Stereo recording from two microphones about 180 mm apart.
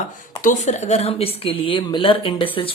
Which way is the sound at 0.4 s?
40° left (ahead or behind).